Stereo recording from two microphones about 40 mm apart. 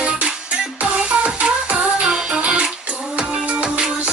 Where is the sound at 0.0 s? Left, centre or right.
Right.